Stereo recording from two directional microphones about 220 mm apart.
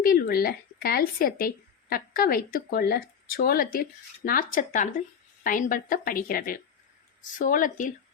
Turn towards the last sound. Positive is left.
turn(degrees=35)  # may be behind; listen again after turning